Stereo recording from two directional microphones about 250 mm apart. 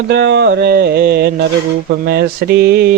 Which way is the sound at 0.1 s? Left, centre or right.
Right.